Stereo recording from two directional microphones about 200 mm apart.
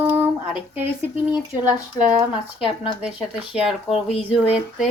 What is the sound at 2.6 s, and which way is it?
Speech, 25° left (ahead or behind).